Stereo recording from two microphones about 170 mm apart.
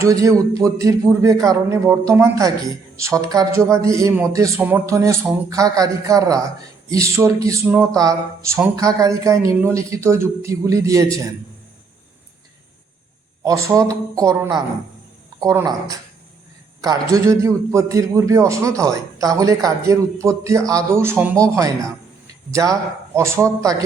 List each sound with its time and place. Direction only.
0.0 s a man's voice: 20° right (ahead or behind)
13.4 s a man's voice: 20° right (ahead or behind)